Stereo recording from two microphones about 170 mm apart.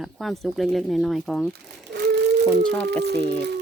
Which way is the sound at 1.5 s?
75° right (ahead or behind).